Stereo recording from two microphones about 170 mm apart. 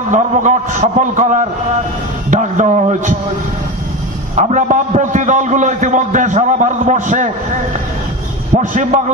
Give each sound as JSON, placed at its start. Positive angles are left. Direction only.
{"t": 0.1, "sound": "a man's voice", "side_deg": -45}
{"t": 4.4, "sound": "a man's voice", "side_deg": -45}
{"t": 8.5, "sound": "a man's voice", "side_deg": -50}